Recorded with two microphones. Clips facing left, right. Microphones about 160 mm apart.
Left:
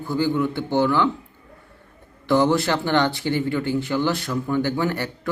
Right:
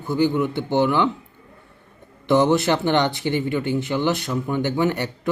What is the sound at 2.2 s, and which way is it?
Speech, 20° right (ahead or behind).